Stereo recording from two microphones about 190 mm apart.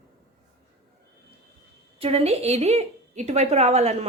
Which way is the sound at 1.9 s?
30° right (ahead or behind).